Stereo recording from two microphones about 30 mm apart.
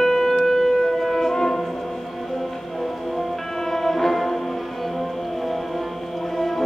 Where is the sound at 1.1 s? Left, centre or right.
Centre.